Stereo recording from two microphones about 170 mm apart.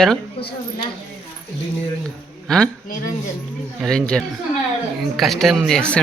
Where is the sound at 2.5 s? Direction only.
Centre (ahead or behind).